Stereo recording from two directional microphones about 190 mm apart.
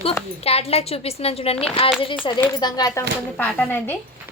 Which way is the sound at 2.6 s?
20° left (ahead or behind).